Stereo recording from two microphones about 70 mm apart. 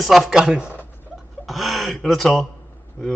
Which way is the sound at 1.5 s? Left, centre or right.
Centre.